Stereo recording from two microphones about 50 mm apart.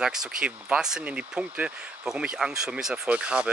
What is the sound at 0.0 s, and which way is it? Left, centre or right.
Speech, centre.